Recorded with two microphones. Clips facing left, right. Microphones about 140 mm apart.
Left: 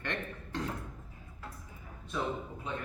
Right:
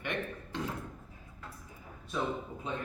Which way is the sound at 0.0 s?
10° right (ahead or behind).